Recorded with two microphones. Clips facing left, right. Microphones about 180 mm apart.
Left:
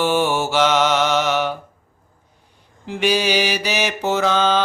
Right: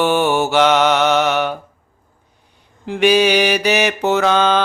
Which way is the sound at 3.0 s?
65° right (ahead or behind).